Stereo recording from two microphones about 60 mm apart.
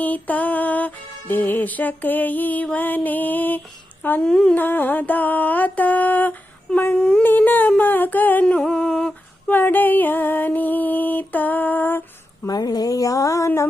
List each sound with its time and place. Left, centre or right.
0.0 s music: left
4.2 s speech: centre
4.5 s music: left
7.2 s humming: left
8.4 s humming: centre
9.5 s music: left
12.5 s a sound: left